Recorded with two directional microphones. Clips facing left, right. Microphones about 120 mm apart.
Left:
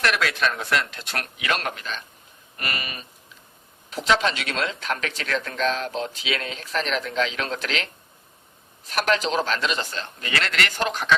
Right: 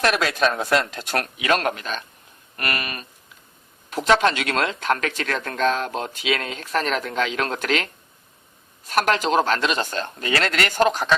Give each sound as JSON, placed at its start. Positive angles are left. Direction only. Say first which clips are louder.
{"t": 0.0, "sound": "speech", "louder": "right 3 dB", "side_deg": -40}
{"t": 9.0, "sound": "speech", "louder": "right 3 dB", "side_deg": -50}